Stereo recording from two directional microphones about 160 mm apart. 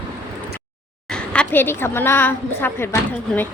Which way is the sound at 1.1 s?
5° left (ahead or behind).